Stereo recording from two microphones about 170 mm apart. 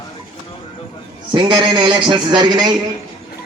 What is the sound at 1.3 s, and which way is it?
A man's voice, 30° right (ahead or behind).